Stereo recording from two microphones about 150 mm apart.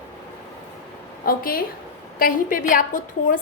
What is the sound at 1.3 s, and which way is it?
A woman's voice, 75° left (ahead or behind).